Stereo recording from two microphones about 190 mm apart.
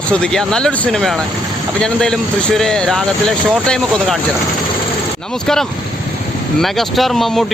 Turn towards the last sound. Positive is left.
turn(degrees=0)  # may be behind; listen again after turning